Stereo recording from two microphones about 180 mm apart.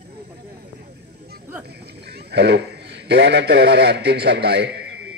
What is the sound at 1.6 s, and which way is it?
A man's voice, 65° right (ahead or behind).